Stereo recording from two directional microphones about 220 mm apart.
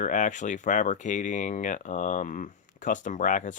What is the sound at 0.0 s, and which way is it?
Speech, 35° left (ahead or behind).